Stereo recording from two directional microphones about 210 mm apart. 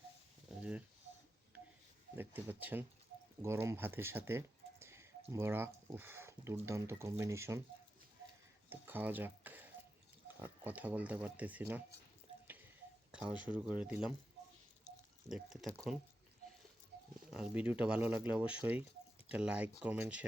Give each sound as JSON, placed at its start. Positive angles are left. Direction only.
{"t": 0.6, "sound": "speech", "side_deg": -5}
{"t": 2.1, "sound": "speech", "side_deg": -10}
{"t": 8.7, "sound": "speech", "side_deg": -10}
{"t": 12.3, "sound": "a sound", "side_deg": -30}
{"t": 13.1, "sound": "a sound", "side_deg": -5}
{"t": 13.5, "sound": "speech", "side_deg": -5}
{"t": 15.3, "sound": "speech", "side_deg": 0}
{"t": 17.3, "sound": "speech", "side_deg": -5}